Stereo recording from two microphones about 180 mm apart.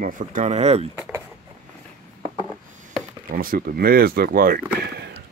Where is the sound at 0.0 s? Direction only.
50° right (ahead or behind).